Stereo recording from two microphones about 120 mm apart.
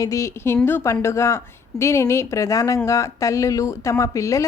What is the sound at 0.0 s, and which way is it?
A woman's voice, 25° left (ahead or behind).